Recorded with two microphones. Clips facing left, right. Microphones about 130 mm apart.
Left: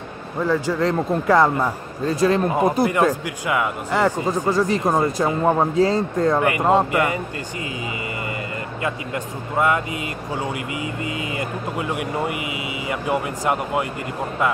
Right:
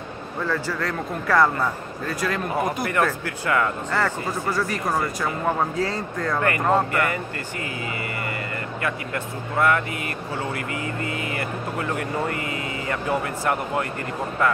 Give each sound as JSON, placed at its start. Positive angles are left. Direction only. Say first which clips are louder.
{"t": 0.4, "sound": "speech", "louder": "left 6 dB", "side_deg": 15}
{"t": 8.8, "sound": "speech", "louder": "left 2 dB", "side_deg": 20}